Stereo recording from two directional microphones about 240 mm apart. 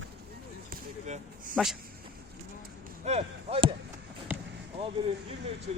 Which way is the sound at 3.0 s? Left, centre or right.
Right.